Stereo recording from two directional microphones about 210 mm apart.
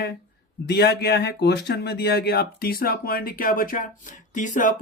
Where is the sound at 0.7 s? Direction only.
50° left (ahead or behind).